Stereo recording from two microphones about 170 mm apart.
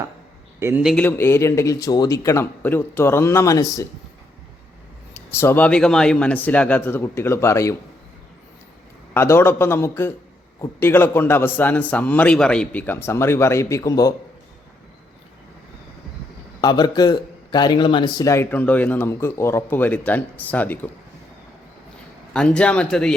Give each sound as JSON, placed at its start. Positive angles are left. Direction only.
{"t": 0.6, "sound": "speech", "side_deg": -10}
{"t": 0.9, "sound": "a man's voice", "side_deg": 15}
{"t": 5.1, "sound": "a man's voice", "side_deg": 15}
{"t": 9.1, "sound": "a man's voice", "side_deg": 15}
{"t": 16.6, "sound": "a man's voice", "side_deg": 25}
{"t": 22.3, "sound": "a man's voice", "side_deg": 5}